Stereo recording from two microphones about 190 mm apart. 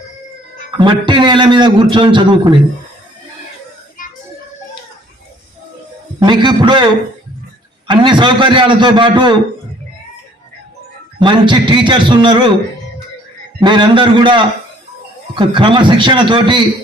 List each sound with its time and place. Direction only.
0.8 s a man's voice: 25° right (ahead or behind)
6.1 s a man's voice: 25° right (ahead or behind)
7.9 s a man's voice: 25° right (ahead or behind)
11.2 s a man's voice: 25° right (ahead or behind)
13.6 s a man's voice: 25° right (ahead or behind)